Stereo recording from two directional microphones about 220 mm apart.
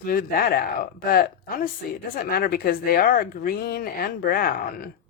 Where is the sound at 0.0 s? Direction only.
40° left (ahead or behind).